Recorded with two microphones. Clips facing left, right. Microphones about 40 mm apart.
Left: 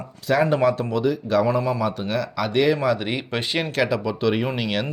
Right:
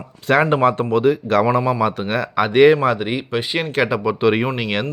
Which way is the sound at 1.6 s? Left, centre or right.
Right.